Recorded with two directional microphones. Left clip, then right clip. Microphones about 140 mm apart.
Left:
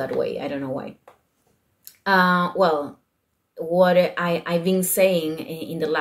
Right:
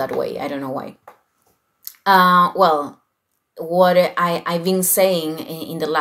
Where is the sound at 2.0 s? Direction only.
15° left (ahead or behind).